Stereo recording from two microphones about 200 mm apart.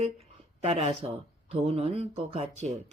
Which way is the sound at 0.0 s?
35° right (ahead or behind).